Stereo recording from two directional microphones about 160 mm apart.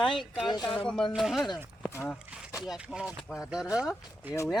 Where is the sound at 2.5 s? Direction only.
5° right (ahead or behind).